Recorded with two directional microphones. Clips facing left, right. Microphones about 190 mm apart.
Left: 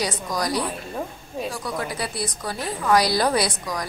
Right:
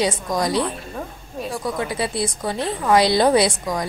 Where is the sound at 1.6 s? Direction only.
25° right (ahead or behind).